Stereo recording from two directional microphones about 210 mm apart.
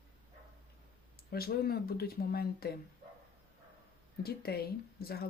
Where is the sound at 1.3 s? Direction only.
45° left (ahead or behind).